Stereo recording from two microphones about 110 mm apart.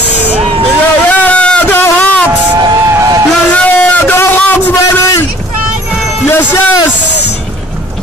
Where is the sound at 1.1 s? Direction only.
15° left (ahead or behind).